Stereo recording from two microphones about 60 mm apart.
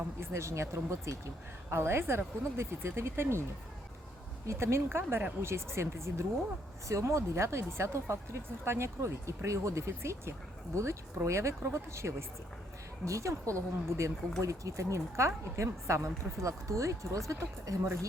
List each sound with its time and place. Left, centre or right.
0.2 s speech: right
1.7 s speech: right
4.4 s speech: right
13.1 s speech: right